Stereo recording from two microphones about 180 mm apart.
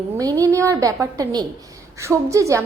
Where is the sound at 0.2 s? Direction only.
20° right (ahead or behind).